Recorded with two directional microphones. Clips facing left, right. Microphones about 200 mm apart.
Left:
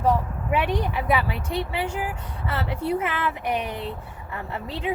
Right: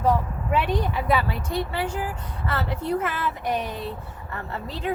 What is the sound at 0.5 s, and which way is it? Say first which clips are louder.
Speech: even; 10° left (ahead or behind).